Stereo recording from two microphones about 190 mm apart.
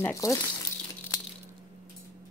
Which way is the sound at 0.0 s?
15° left (ahead or behind).